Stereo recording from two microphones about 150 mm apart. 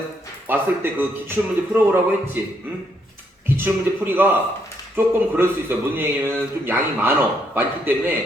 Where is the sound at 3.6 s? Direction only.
15° right (ahead or behind).